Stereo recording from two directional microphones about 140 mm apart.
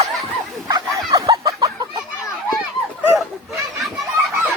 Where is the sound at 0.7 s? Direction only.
25° right (ahead or behind).